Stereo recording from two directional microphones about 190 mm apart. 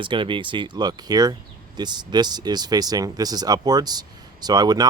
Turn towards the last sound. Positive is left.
turn(degrees=-20)  # may be behind; listen again after turning